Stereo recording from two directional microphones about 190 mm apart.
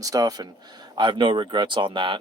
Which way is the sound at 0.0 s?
20° right (ahead or behind).